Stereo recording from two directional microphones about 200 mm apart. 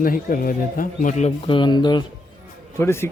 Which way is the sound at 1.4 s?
25° left (ahead or behind).